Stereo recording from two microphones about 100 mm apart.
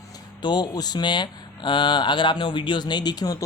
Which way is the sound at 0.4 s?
45° left (ahead or behind).